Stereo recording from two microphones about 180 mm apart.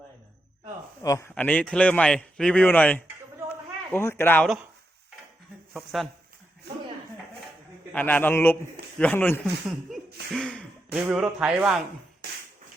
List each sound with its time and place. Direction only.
1.0 s speech: 15° left (ahead or behind)
3.5 s a sound: 15° left (ahead or behind)
5.7 s speech: centre (ahead or behind)
7.9 s speech: 10° left (ahead or behind)
10.3 s throat clearing: 5° left (ahead or behind)
10.9 s speech: 5° right (ahead or behind)